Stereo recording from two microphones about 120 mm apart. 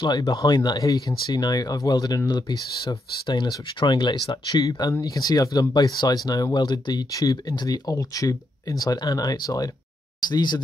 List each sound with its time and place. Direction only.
0.3 s speech: 35° left (ahead or behind)